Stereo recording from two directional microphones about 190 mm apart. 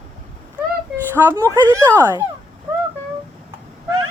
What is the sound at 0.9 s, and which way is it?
Speech, 15° right (ahead or behind).